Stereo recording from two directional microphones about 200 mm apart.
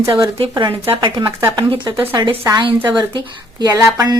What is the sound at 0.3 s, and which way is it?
Speech, 25° right (ahead or behind).